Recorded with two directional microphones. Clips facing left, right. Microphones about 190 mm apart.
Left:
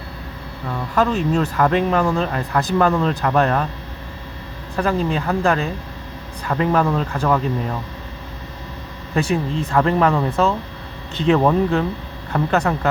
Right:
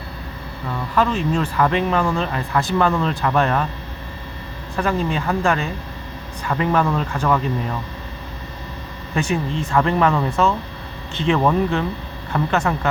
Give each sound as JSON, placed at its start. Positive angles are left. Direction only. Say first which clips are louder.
{"t": 0.7, "sound": "speech", "louder": "left 1 dB", "side_deg": 45}
{"t": 4.8, "sound": "speech", "louder": "left 1 dB", "side_deg": 35}
{"t": 9.1, "sound": "speech", "louder": "left 2 dB", "side_deg": 35}